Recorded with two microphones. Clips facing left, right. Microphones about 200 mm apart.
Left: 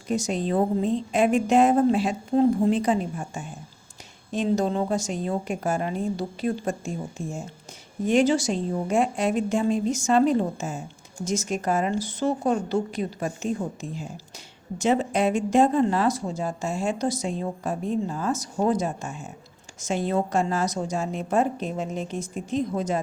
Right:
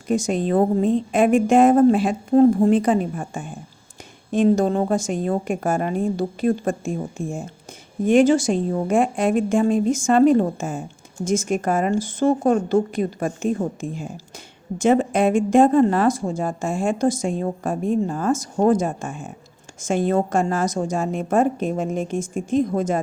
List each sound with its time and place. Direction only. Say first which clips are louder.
0.1 s speech: right 5 dB; 55° right (ahead or behind)